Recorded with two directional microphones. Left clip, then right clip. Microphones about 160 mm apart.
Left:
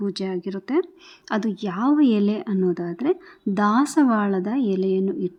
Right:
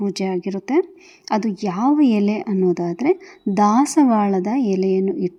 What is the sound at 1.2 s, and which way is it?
A woman's voice, 10° right (ahead or behind).